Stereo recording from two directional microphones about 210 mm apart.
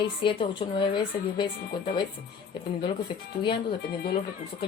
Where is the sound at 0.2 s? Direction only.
25° left (ahead or behind).